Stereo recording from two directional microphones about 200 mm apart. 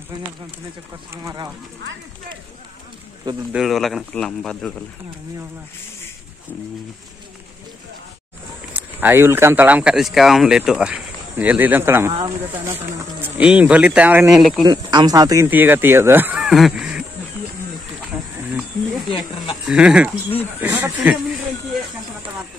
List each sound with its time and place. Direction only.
1.1 s speech: 15° right (ahead or behind)
3.5 s a man's voice: centre (ahead or behind)
8.7 s speech: 10° right (ahead or behind)
13.2 s speech: 5° right (ahead or behind)
14.6 s speech: 20° right (ahead or behind); by 17.0 s centre (ahead or behind)
19.6 s a man's voice: 5° right (ahead or behind)